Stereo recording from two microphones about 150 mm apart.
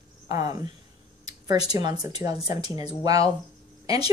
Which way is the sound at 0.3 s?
25° right (ahead or behind).